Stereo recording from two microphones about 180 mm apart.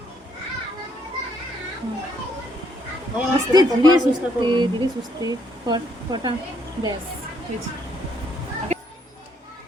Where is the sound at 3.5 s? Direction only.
20° right (ahead or behind).